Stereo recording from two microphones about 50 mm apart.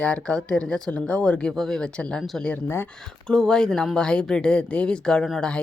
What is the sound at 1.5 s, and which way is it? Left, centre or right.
Speech, centre.